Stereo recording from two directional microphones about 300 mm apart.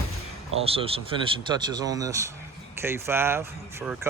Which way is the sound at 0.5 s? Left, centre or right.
Centre.